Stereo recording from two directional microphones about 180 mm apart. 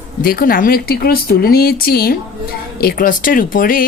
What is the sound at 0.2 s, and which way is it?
Speech, 55° left (ahead or behind).